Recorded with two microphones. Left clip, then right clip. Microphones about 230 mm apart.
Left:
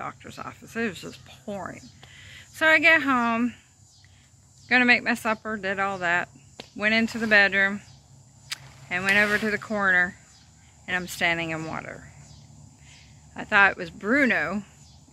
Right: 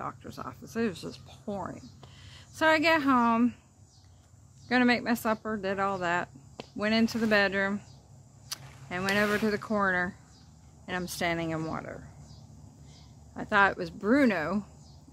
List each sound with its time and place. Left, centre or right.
0.0 s a woman's voice: centre
4.6 s speech: centre
8.5 s a sound: centre
9.7 s speech: centre
13.3 s speech: centre